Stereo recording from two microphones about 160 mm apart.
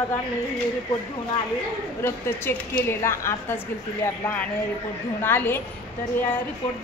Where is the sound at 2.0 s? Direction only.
15° left (ahead or behind).